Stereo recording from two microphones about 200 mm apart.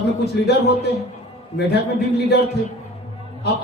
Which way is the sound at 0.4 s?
55° left (ahead or behind).